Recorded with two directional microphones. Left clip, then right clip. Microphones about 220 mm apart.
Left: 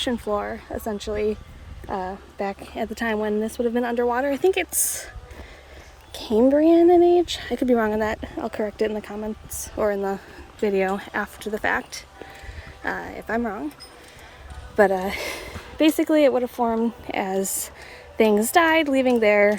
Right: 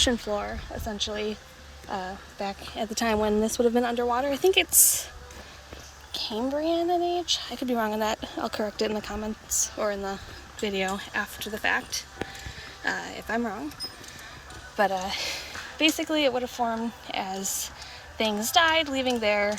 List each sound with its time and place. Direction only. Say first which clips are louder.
0.3 s speech: left 4 dB; 25° left (ahead or behind)
6.3 s speech: left 11 dB; 35° left (ahead or behind)
14.8 s speech: left 6 dB; 30° left (ahead or behind)